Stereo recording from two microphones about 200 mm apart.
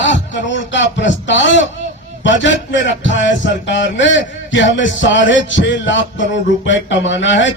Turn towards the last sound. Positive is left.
turn(degrees=65)  # may be behind; listen again after turning